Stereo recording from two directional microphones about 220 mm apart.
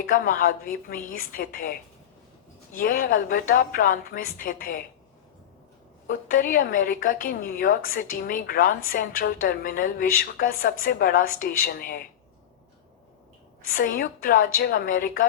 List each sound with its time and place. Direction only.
0.0 s a woman's voice: 40° left (ahead or behind)
2.7 s a woman's voice: 40° left (ahead or behind)
6.1 s a woman's voice: 40° left (ahead or behind)
13.7 s a woman's voice: 40° left (ahead or behind)